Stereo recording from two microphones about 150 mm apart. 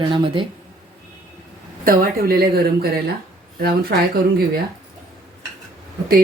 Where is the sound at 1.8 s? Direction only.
75° right (ahead or behind).